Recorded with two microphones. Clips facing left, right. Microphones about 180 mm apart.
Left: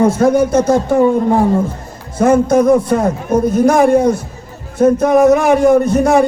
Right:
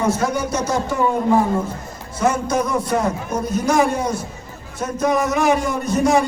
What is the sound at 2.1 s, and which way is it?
A man's voice, 55° left (ahead or behind).